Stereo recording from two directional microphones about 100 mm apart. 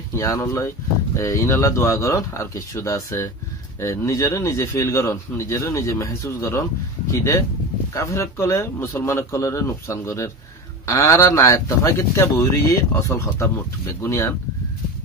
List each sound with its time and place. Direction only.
0.1 s a man's voice: 30° left (ahead or behind)